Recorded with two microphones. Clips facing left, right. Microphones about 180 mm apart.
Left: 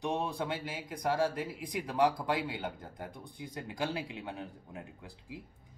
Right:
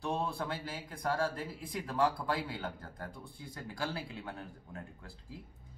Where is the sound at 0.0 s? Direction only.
15° left (ahead or behind).